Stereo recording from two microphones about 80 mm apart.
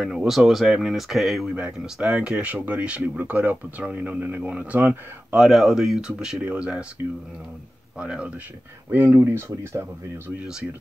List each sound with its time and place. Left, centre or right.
0.0 s speech: centre
1.5 s speech: centre
5.4 s speech: centre
8.0 s speech: centre
8.9 s speech: right